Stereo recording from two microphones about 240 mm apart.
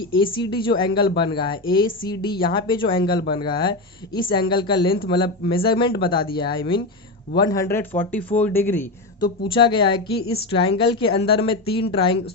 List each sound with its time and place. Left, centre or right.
0.3 s speech: centre
9.4 s speech: centre